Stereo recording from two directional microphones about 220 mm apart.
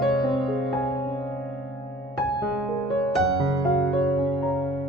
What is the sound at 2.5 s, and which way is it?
Music, centre (ahead or behind).